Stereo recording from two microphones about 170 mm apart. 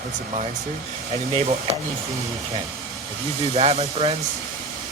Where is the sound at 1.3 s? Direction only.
35° right (ahead or behind).